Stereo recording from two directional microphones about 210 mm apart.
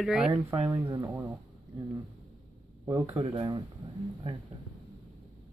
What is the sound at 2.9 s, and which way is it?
Speech, 15° right (ahead or behind).